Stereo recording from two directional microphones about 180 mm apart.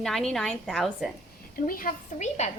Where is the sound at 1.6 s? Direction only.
50° left (ahead or behind).